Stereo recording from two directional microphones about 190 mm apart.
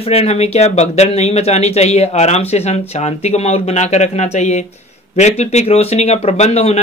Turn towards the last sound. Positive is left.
turn(degrees=35)  # may be behind; listen again after turning